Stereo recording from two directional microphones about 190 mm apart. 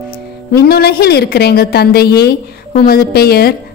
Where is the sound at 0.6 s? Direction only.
55° left (ahead or behind).